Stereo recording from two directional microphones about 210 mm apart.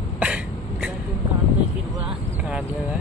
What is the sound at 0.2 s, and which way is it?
Throat clearing, 5° right (ahead or behind).